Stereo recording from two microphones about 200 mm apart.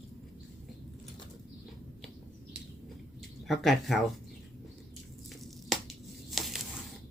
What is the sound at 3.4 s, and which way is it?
Speech, centre (ahead or behind).